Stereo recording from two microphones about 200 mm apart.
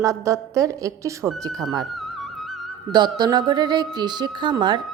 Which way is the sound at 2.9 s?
20° right (ahead or behind).